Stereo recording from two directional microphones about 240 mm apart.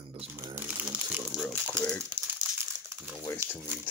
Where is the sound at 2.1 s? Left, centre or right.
Centre.